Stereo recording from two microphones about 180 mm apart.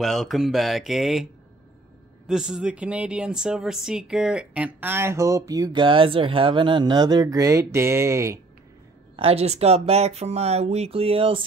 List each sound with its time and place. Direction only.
0.0 s speech: centre (ahead or behind)
2.2 s speech: 5° right (ahead or behind)
9.1 s speech: 35° right (ahead or behind)